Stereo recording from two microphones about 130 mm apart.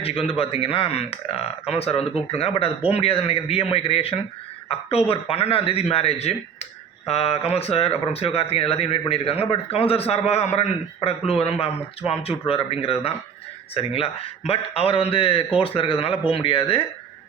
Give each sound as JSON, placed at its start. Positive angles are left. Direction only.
{"t": 0.0, "sound": "speech", "side_deg": 50}